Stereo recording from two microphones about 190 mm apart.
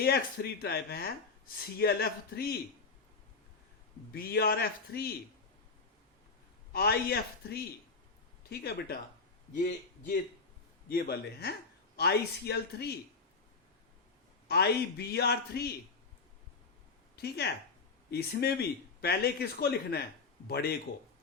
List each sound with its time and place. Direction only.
0.0 s speech: 55° left (ahead or behind)
4.1 s speech: 55° left (ahead or behind)
6.7 s speech: 55° left (ahead or behind)
10.8 s speech: 50° left (ahead or behind)
14.4 s speech: 60° left (ahead or behind)
17.2 s speech: 60° left (ahead or behind)